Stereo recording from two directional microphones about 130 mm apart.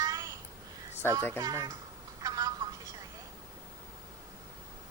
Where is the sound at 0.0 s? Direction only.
30° right (ahead or behind).